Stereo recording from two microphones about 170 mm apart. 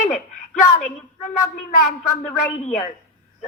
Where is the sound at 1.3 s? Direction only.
50° left (ahead or behind).